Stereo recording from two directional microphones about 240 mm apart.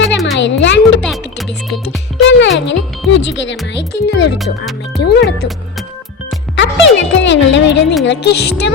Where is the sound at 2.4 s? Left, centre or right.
Left.